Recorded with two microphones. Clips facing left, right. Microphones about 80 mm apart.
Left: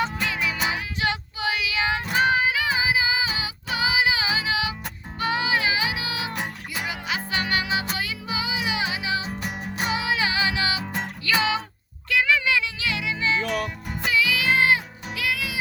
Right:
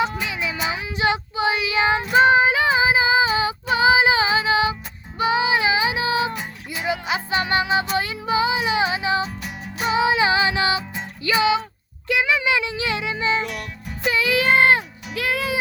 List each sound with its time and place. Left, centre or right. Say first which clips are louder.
0.0 s music: right 2 dB; centre; by 4.7 s right
5.2 s music: right 5 dB; centre
9.4 s music: left 2 dB; left
9.8 s music: right 7 dB; right
11.3 s music: right 5 dB; centre
13.5 s music: left 5 dB; left
14.1 s music: right 4 dB; right